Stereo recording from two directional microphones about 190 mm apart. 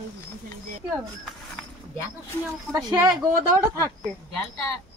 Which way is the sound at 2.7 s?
20° right (ahead or behind).